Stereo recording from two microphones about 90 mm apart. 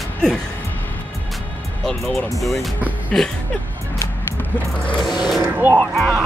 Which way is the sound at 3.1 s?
10° left (ahead or behind).